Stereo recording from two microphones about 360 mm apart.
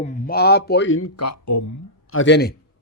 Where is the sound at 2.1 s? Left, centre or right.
Left.